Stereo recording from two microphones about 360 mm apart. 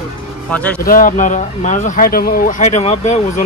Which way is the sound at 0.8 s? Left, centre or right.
Left.